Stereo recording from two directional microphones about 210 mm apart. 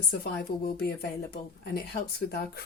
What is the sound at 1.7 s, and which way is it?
Speech, 50° left (ahead or behind).